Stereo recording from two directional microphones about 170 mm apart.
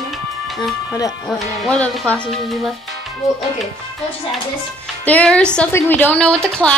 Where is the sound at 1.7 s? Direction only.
5° left (ahead or behind).